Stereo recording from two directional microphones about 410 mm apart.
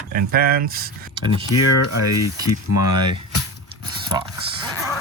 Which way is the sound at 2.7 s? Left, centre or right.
Left.